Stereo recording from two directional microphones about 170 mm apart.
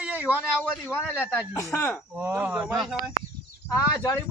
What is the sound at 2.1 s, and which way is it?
Speech, 10° right (ahead or behind).